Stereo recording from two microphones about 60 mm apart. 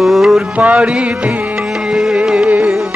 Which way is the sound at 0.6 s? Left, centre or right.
Right.